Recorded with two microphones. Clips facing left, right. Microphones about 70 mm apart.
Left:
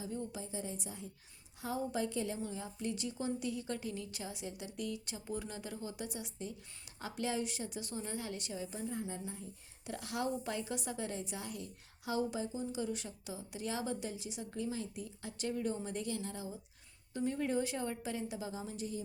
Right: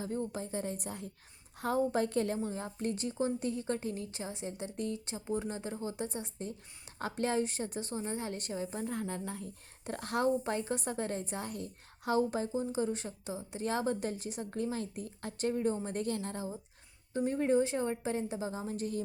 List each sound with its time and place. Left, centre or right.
0.0 s a woman's voice: right
8.9 s a woman's voice: right
9.8 s a woman's voice: right